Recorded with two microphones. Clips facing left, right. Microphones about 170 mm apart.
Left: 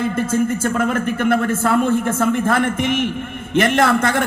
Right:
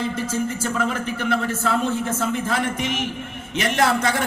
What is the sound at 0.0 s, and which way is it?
A man's voice, 55° left (ahead or behind).